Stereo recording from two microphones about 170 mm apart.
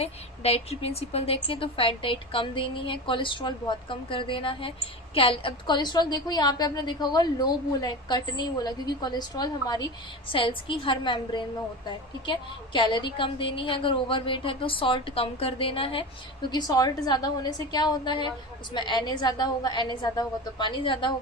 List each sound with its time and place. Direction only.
0.0 s a woman's voice: 35° left (ahead or behind)